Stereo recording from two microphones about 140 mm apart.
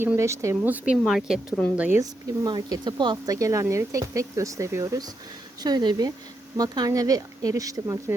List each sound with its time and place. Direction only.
0.0 s speech: 20° right (ahead or behind)
1.0 s speech: centre (ahead or behind)
2.0 s speech: 25° right (ahead or behind)